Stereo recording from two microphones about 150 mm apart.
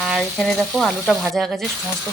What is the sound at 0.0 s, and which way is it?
Frying, centre (ahead or behind).